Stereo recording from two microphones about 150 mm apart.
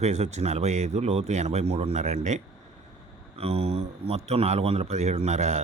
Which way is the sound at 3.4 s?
45° right (ahead or behind).